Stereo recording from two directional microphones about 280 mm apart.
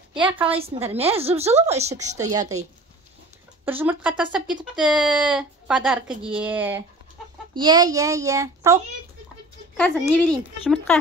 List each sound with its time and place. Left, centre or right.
0.1 s speech: centre
0.8 s a woman's voice: right
2.1 s a child's voice: centre
3.6 s a child's voice: centre
9.8 s speech: centre